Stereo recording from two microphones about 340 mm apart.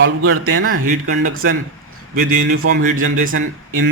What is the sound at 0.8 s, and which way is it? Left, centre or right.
Speech, right.